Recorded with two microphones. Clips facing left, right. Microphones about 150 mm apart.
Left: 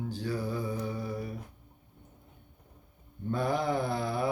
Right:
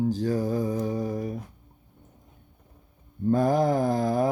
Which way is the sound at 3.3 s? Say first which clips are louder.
Right 8 dB; 45° right (ahead or behind).